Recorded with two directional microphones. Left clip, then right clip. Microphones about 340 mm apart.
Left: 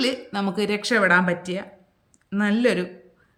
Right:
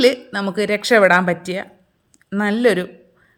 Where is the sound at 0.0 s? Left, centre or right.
Centre.